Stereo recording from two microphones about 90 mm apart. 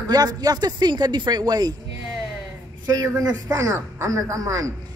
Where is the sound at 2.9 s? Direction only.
40° right (ahead or behind).